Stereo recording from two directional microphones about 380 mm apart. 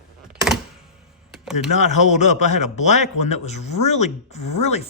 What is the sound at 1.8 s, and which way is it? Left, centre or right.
Speech, centre.